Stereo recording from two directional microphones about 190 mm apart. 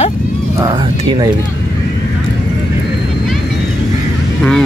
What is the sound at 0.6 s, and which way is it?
Speech, 20° right (ahead or behind).